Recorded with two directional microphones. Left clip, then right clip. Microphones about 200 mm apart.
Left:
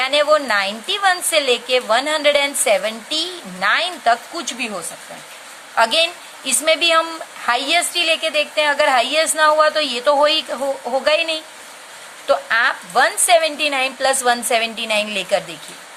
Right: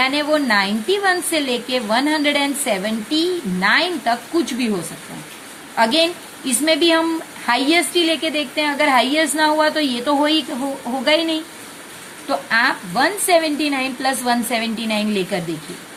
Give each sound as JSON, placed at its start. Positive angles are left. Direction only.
{"t": 0.0, "sound": "a woman's voice", "side_deg": 30}
{"t": 5.7, "sound": "a woman's voice", "side_deg": 30}